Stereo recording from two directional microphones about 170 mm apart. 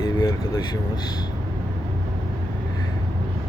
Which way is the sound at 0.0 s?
25° left (ahead or behind).